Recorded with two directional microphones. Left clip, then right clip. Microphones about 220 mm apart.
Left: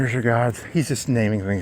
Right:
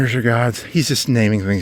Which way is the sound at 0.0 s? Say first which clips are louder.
Right 3 dB; 50° right (ahead or behind).